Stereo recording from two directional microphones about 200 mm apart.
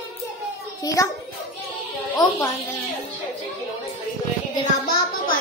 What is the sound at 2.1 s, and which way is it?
Child singing, 15° left (ahead or behind).